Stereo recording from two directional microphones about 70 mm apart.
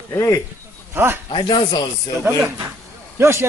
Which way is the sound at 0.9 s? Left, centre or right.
Right.